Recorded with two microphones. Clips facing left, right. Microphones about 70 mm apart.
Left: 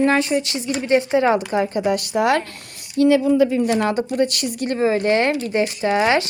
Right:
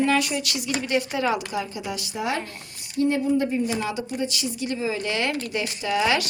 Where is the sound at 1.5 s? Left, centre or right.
Left.